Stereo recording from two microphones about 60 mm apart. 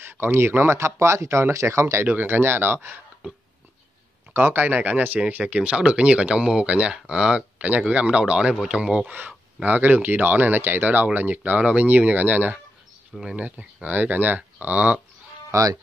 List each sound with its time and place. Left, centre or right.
0.0 s speech: right
2.0 s speech: right
4.3 s speech: right; by 9.1 s centre
9.1 s speech: right
13.1 s speech: centre
13.8 s speech: right
15.5 s speech: right